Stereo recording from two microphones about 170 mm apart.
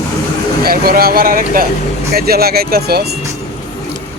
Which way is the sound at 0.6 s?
60° right (ahead or behind).